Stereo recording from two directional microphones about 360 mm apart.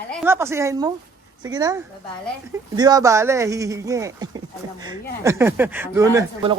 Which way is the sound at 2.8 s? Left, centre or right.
Centre.